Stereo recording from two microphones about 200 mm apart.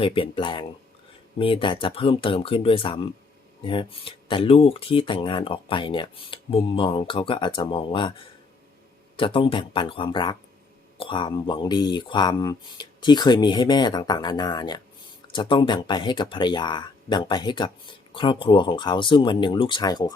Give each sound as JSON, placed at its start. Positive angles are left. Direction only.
{"t": 0.0, "sound": "speech", "side_deg": 25}